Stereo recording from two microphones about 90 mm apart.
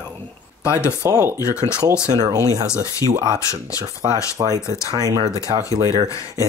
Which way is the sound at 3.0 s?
35° right (ahead or behind).